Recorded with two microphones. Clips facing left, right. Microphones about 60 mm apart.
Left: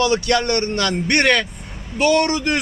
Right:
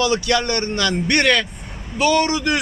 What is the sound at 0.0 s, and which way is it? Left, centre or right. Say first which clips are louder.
Speech: left 1 dB; left.